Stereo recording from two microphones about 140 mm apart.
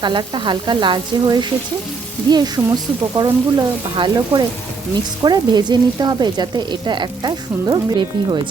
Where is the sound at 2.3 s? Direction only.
30° right (ahead or behind).